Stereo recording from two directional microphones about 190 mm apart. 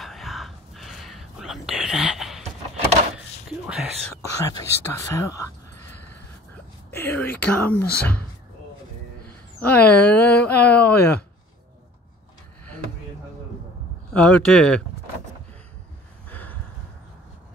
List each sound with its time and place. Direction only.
0.0 s whispering: centre (ahead or behind)
4.1 s speech: 15° left (ahead or behind)
6.9 s speech: 10° left (ahead or behind)
9.6 s speech: 10° left (ahead or behind)
14.1 s speech: 5° left (ahead or behind)
16.3 s a sound: 10° left (ahead or behind)